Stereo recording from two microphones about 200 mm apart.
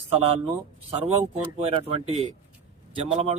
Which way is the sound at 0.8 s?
30° right (ahead or behind).